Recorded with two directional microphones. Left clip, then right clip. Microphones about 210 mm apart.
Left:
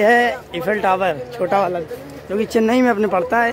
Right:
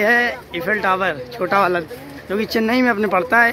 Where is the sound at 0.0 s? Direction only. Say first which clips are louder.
Left 2 dB; 15° left (ahead or behind).